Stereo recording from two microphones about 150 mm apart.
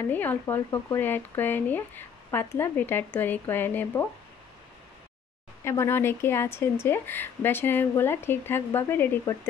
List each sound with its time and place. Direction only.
0.0 s speech: 10° left (ahead or behind)
5.6 s speech: 15° left (ahead or behind)